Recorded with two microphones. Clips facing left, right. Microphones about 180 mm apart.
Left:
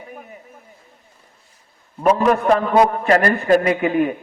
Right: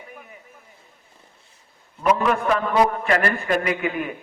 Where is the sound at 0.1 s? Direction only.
45° left (ahead or behind).